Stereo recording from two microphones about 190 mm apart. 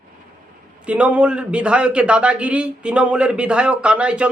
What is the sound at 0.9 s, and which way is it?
A man's voice, 5° right (ahead or behind).